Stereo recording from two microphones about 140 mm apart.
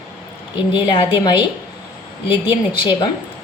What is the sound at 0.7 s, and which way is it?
Speech, 35° left (ahead or behind).